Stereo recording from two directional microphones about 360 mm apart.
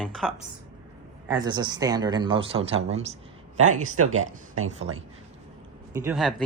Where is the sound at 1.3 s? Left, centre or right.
Centre.